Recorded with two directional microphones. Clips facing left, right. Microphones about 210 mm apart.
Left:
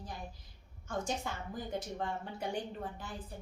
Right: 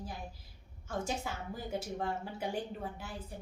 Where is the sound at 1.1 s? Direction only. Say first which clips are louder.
Even; 5° right (ahead or behind).